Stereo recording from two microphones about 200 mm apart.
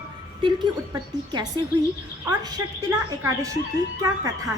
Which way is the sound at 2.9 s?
15° right (ahead or behind).